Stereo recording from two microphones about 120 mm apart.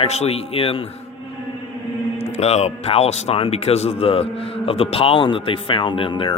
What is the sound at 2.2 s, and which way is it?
Speech, 60° left (ahead or behind).